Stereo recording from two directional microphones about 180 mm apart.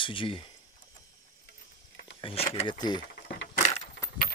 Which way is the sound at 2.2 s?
35° left (ahead or behind).